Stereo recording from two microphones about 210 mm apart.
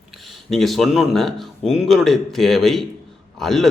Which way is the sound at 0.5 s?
Centre (ahead or behind).